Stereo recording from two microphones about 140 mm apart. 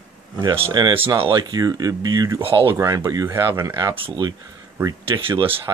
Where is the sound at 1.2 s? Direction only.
35° right (ahead or behind).